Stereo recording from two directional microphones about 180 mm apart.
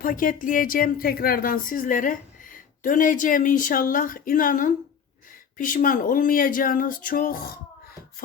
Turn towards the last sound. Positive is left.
turn(degrees=50)  # may be behind; listen again after turning